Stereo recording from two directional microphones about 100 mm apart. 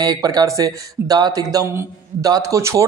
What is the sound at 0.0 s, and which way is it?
Speech, 40° right (ahead or behind).